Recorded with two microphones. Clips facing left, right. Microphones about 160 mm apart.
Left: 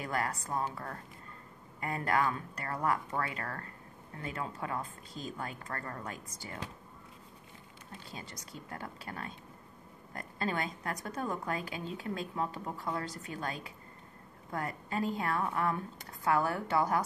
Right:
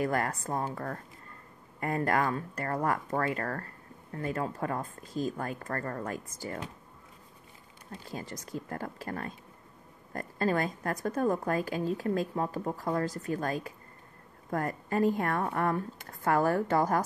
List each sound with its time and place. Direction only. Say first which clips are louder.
0.0 s speech: right 5 dB; 45° right (ahead or behind)
8.1 s a woman's voice: right 10 dB; 45° right (ahead or behind)